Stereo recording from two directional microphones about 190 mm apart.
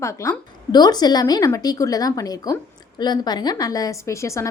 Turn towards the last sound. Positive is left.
turn(degrees=15)  # may be behind; listen again after turning